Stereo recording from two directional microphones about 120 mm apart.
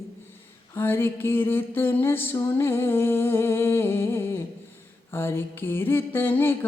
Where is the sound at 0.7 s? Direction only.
20° left (ahead or behind).